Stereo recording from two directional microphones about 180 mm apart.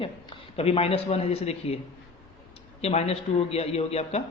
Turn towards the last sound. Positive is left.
turn(degrees=35)  # may be behind; listen again after turning